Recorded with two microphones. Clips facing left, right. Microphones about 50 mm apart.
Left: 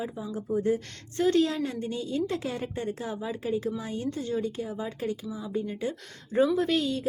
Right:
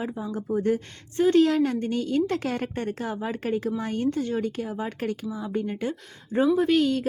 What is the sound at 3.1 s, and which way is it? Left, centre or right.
Speech, right.